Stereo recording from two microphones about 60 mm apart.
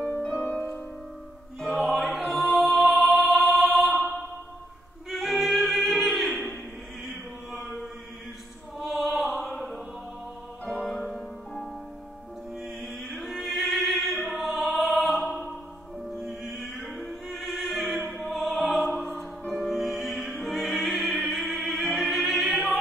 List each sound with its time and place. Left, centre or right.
0.0 s music: centre
1.9 s music: centre
5.1 s music: centre
7.1 s chant: centre
8.7 s music: centre
12.8 s music: centre
16.2 s opera: centre
19.5 s music: centre